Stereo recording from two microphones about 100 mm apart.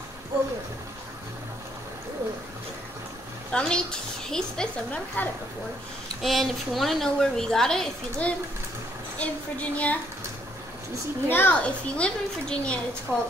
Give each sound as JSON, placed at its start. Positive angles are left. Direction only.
{"t": 3.5, "sound": "a woman's voice", "side_deg": 10}
{"t": 6.2, "sound": "a woman's voice", "side_deg": 0}
{"t": 11.2, "sound": "a woman's voice", "side_deg": 20}
{"t": 13.1, "sound": "speech", "side_deg": -20}